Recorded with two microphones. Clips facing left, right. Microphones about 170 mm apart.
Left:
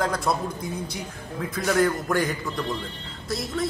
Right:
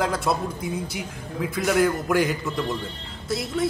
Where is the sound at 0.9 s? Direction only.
15° right (ahead or behind).